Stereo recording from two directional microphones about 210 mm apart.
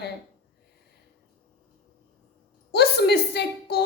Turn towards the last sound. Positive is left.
turn(degrees=50)  # may be behind; listen again after turning